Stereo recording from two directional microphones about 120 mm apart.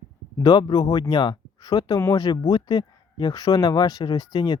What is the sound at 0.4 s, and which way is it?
Speech, 35° left (ahead or behind).